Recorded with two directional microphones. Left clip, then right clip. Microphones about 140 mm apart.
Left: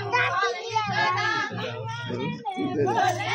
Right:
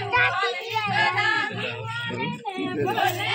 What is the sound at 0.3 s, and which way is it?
Music, 15° left (ahead or behind).